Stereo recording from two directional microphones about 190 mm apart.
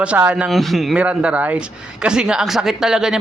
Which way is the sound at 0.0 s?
5° right (ahead or behind).